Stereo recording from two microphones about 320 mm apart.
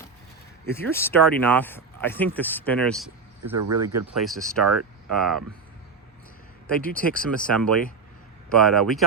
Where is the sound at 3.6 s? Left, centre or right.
Right.